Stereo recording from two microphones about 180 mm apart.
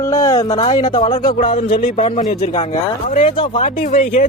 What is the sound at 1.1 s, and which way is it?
Speech, 50° left (ahead or behind).